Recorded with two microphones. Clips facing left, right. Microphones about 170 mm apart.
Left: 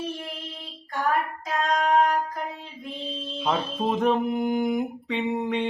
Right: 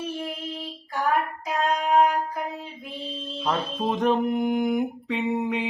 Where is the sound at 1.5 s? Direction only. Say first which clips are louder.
Left 1 dB; 5° right (ahead or behind).